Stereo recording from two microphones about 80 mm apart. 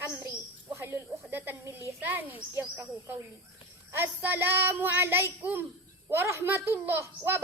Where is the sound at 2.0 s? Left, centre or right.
Right.